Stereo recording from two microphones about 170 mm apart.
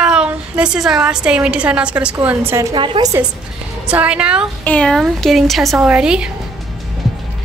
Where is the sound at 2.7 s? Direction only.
30° right (ahead or behind).